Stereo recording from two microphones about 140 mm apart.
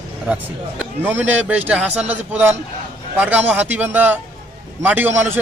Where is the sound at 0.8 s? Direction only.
15° right (ahead or behind).